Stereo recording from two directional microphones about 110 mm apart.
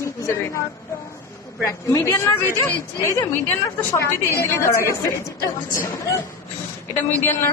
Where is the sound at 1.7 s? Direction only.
25° left (ahead or behind).